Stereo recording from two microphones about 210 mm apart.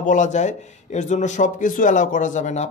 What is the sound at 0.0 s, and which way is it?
A man's voice, 35° left (ahead or behind).